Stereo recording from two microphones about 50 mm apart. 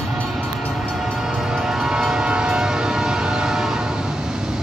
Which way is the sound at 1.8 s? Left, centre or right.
Centre.